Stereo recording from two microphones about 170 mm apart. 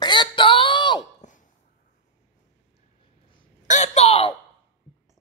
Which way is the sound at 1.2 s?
45° left (ahead or behind).